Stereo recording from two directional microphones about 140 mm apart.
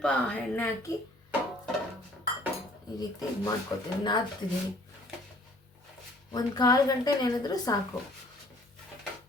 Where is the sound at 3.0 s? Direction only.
25° left (ahead or behind).